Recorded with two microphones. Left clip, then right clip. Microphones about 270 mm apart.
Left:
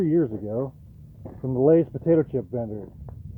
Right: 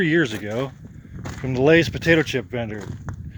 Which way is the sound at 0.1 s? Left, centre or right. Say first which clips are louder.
Right 3 dB; right.